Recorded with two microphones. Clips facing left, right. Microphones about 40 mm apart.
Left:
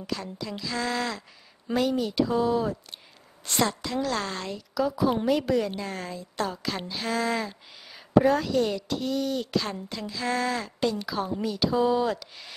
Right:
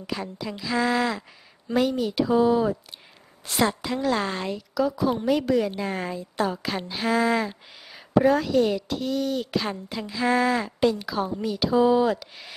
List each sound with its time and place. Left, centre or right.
0.0 s a woman's voice: centre
4.7 s a woman's voice: centre
5.8 s a woman's voice: centre